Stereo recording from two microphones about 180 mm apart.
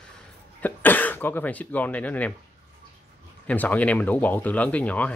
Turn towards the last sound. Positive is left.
turn(degrees=10)  # may be behind; listen again after turning